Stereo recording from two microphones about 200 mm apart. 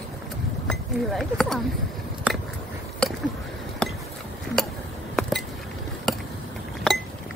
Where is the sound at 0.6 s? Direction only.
Centre (ahead or behind).